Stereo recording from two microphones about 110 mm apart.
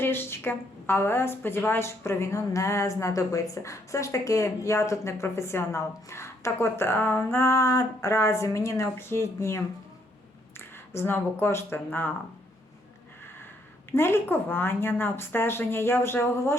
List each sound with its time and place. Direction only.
0.0 s a woman's voice: 20° left (ahead or behind)
13.9 s a woman's voice: 20° left (ahead or behind)